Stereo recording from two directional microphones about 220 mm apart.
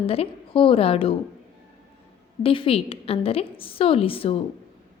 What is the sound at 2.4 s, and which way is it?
A woman's voice, 25° left (ahead or behind).